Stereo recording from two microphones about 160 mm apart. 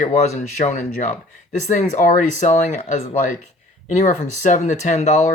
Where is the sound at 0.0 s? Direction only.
50° left (ahead or behind).